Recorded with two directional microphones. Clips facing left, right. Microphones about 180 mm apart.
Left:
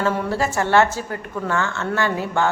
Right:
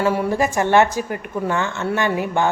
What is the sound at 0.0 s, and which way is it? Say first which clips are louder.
A woman's voice: right 3 dB; 10° right (ahead or behind).